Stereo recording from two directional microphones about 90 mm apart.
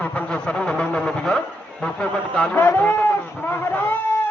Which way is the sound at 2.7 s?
20° left (ahead or behind).